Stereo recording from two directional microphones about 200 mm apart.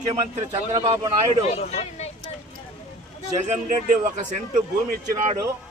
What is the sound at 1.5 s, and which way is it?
Speech, 35° left (ahead or behind).